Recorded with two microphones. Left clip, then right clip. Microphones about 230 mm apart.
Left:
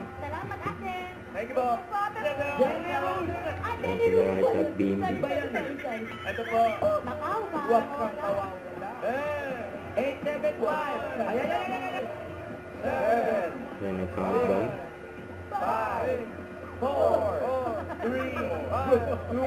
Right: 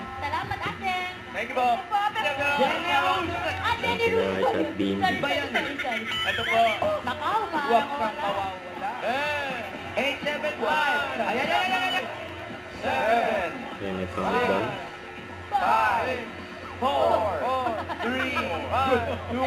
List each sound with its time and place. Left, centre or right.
1.4 s speech: right
9.0 s a sound: centre
12.8 s speech: centre
15.6 s speech: right